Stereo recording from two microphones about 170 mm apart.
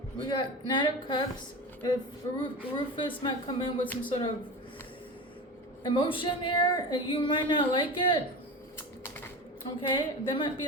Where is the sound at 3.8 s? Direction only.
10° left (ahead or behind).